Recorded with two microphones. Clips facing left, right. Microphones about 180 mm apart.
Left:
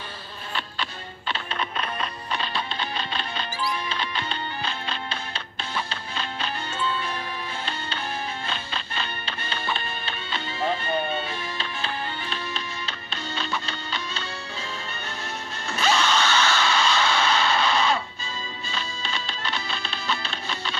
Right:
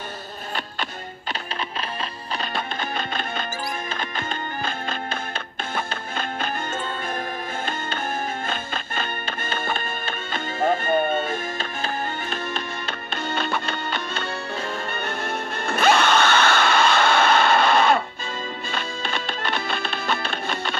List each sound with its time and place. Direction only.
2.3 s music: 45° right (ahead or behind)
8.5 s music: 50° right (ahead or behind)